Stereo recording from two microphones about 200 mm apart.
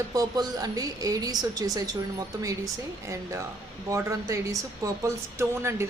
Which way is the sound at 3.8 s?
15° right (ahead or behind).